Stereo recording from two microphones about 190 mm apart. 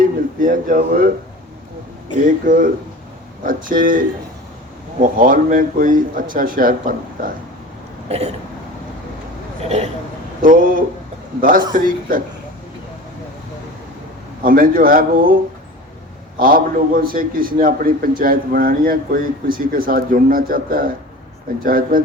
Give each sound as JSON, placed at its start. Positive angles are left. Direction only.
{"t": 0.0, "sound": "a sound", "side_deg": -45}
{"t": 2.2, "sound": "a man's voice", "side_deg": -45}
{"t": 8.1, "sound": "throat clearing", "side_deg": -35}
{"t": 9.6, "sound": "throat clearing", "side_deg": -35}
{"t": 10.4, "sound": "a man's voice", "side_deg": -45}
{"t": 14.4, "sound": "a man's voice", "side_deg": -50}
{"t": 16.4, "sound": "a man's voice", "side_deg": -50}